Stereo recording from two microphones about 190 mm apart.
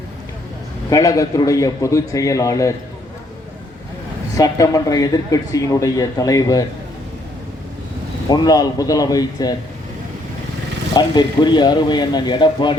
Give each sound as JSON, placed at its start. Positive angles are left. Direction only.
{"t": 0.9, "sound": "speech", "side_deg": 15}
{"t": 4.4, "sound": "speech", "side_deg": 20}
{"t": 8.3, "sound": "speech", "side_deg": 20}
{"t": 10.9, "sound": "speech", "side_deg": 20}